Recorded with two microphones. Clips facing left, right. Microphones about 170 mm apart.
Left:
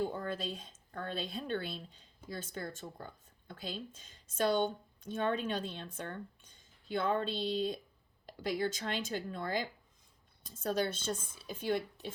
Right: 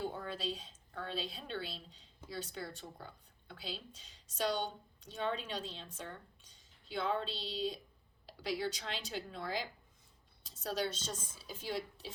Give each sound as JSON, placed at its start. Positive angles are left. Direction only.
{"t": 0.1, "sound": "speech", "side_deg": 50}